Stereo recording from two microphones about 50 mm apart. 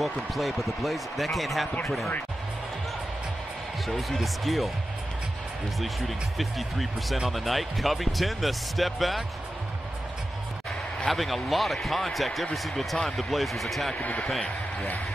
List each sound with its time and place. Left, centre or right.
0.0 s speech: centre
4.2 s speech: centre
5.8 s speech: centre
11.1 s speech: centre
13.9 s speech: left